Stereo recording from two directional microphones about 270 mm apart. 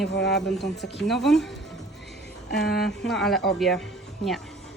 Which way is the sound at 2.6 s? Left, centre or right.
Centre.